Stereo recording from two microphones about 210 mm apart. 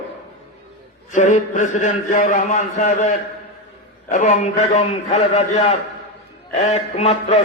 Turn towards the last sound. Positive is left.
turn(degrees=30)  # may be behind; listen again after turning